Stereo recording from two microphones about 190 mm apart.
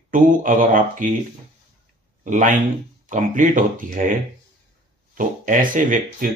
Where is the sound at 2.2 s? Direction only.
40° right (ahead or behind).